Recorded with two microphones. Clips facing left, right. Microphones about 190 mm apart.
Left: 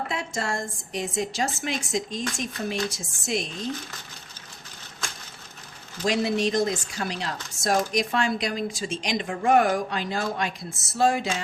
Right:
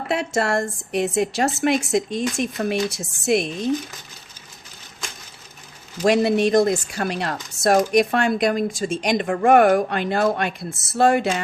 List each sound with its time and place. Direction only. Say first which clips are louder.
0.1 s speech: right 8 dB; 70° right (ahead or behind)
6.0 s speech: right 7 dB; 60° right (ahead or behind)